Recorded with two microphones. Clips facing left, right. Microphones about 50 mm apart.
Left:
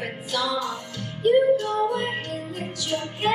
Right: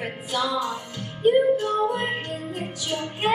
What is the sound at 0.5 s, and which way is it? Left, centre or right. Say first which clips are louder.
Speech: right 1 dB; centre.